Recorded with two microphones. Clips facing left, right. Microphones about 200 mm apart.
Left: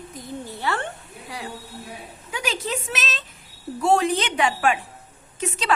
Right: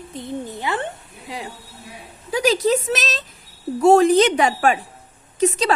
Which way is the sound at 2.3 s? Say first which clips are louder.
Right 10 dB; 35° right (ahead or behind).